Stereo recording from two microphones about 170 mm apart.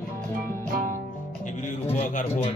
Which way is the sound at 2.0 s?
40° left (ahead or behind).